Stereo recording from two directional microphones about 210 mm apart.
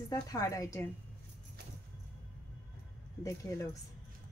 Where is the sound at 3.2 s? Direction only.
15° left (ahead or behind).